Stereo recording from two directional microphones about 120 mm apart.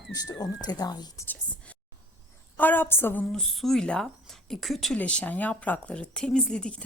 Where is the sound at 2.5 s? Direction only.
15° left (ahead or behind).